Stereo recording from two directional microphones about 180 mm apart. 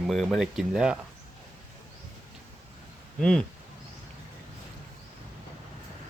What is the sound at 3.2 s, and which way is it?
Speech, 5° left (ahead or behind).